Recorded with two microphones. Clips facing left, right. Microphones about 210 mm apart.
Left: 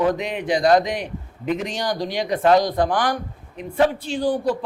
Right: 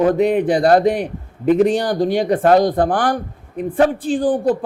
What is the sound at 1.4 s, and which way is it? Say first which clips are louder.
Speech: right 10 dB; 45° right (ahead or behind).